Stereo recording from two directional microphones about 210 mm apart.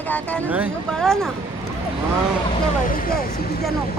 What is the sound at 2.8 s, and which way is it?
Speech, 40° left (ahead or behind).